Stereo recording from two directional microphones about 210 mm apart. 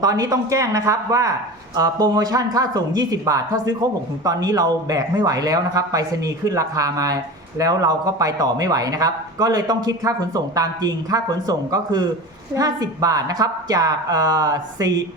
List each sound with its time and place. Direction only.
0.0 s a man's voice: 15° right (ahead or behind)